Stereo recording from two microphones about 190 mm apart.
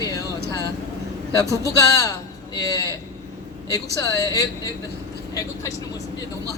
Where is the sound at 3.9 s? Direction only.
15° left (ahead or behind).